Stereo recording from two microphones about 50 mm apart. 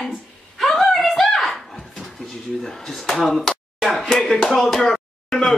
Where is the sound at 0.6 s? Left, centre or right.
Centre.